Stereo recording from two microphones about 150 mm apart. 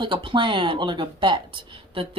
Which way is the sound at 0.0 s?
35° right (ahead or behind).